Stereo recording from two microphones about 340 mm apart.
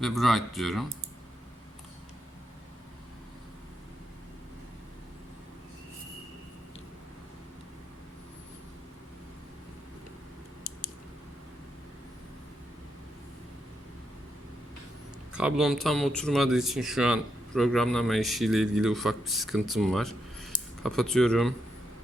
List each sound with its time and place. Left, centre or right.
0.0 s speech: centre
15.3 s speech: centre